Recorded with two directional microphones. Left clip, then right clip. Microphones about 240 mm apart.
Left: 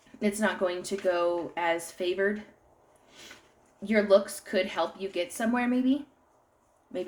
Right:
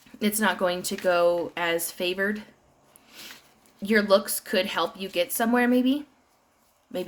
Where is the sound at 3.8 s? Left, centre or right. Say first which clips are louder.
Right 2 dB; right.